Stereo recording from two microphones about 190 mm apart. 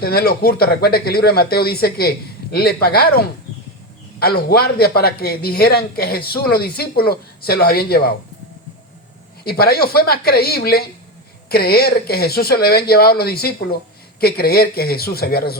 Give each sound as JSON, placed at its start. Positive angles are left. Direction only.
{"t": 0.0, "sound": "a man's voice", "side_deg": 55}
{"t": 9.4, "sound": "a man's voice", "side_deg": 55}